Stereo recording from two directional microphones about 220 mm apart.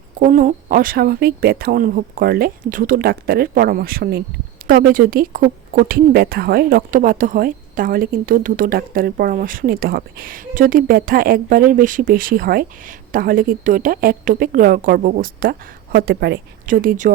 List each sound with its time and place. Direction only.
0.2 s speech: 35° right (ahead or behind)